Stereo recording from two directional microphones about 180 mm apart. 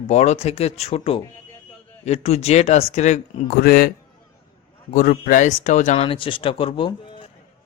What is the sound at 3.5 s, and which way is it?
Speech, 55° left (ahead or behind).